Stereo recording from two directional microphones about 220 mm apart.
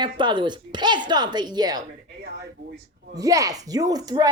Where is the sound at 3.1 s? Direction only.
15° right (ahead or behind).